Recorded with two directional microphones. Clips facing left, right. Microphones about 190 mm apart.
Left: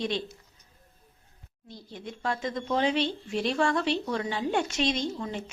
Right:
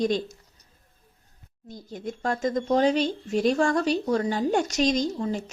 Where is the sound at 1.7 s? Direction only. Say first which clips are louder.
Right 6 dB; 45° right (ahead or behind).